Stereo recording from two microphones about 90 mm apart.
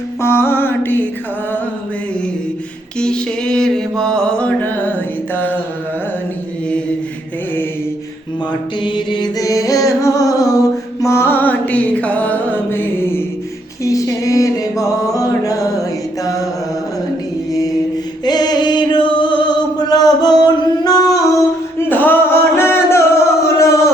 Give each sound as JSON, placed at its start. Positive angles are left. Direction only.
{"t": 0.2, "sound": "music", "side_deg": 25}
{"t": 3.0, "sound": "mantra", "side_deg": 10}
{"t": 8.8, "sound": "mantra", "side_deg": 60}
{"t": 9.4, "sound": "music", "side_deg": 40}
{"t": 13.8, "sound": "music", "side_deg": 35}
{"t": 16.2, "sound": "mantra", "side_deg": 40}
{"t": 17.5, "sound": "mantra", "side_deg": 40}
{"t": 18.3, "sound": "music", "side_deg": 50}
{"t": 20.8, "sound": "singing", "side_deg": 45}
{"t": 21.8, "sound": "singing", "side_deg": 20}